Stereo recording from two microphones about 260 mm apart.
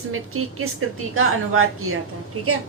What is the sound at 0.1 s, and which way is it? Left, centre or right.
A woman's voice, right.